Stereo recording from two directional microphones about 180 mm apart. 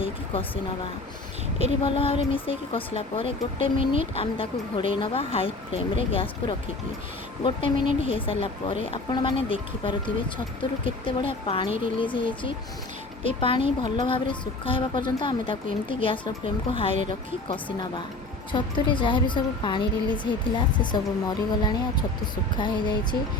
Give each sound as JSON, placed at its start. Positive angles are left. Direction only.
{"t": 0.0, "sound": "speech", "side_deg": 30}
{"t": 1.8, "sound": "speech", "side_deg": 30}
{"t": 7.4, "sound": "a woman's voice", "side_deg": 30}